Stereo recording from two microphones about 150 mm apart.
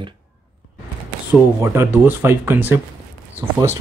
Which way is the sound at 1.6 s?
15° right (ahead or behind).